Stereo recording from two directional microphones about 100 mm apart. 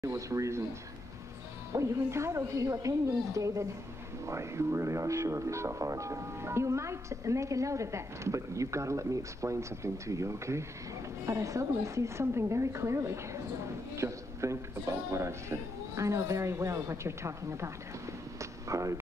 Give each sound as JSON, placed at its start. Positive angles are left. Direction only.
{"t": 0.0, "sound": "speech", "side_deg": -30}
{"t": 1.7, "sound": "speech", "side_deg": -30}